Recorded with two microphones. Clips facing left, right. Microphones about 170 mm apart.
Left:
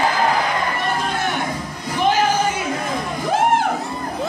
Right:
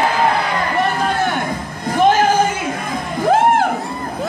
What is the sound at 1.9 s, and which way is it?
Music, 50° right (ahead or behind).